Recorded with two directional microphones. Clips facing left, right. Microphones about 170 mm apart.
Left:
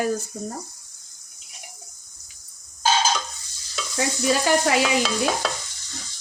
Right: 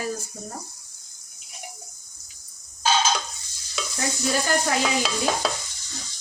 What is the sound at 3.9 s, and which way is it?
Speech, 85° left.